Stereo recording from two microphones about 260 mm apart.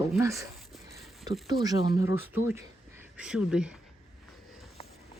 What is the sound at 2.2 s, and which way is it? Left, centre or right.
Speech, centre.